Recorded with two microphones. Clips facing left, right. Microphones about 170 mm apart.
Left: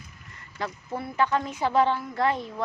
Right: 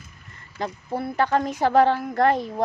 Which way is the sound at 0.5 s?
25° right (ahead or behind).